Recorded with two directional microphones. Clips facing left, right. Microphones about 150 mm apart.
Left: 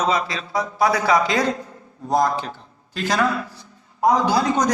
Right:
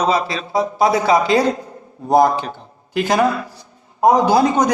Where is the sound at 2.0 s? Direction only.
60° right (ahead or behind).